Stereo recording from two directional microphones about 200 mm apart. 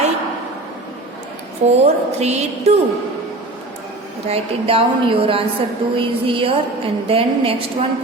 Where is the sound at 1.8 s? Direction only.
35° right (ahead or behind).